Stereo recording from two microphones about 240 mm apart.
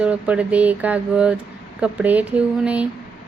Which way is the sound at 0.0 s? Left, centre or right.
Centre.